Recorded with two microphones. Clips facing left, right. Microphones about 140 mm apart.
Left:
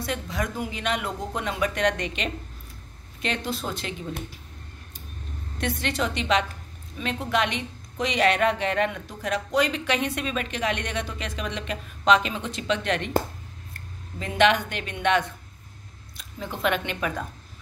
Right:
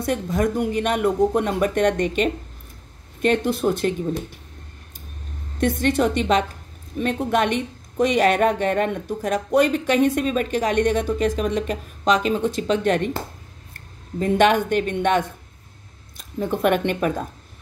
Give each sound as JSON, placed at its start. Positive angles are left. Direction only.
{"t": 0.0, "sound": "a woman's voice", "side_deg": -50}
{"t": 5.6, "sound": "a woman's voice", "side_deg": -50}
{"t": 14.2, "sound": "a woman's voice", "side_deg": -45}